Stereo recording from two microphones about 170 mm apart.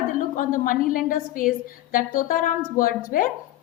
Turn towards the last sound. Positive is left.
turn(degrees=55)  # may be behind; listen again after turning